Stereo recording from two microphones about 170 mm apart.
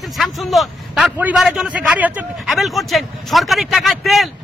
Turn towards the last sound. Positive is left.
turn(degrees=0)  # may be behind; listen again after turning